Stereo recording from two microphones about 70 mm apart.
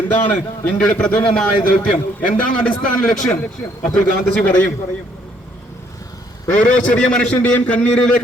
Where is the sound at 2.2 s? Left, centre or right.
Centre.